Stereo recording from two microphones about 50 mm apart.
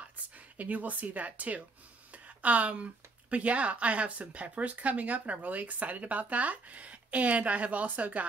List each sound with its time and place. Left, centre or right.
0.6 s speech: right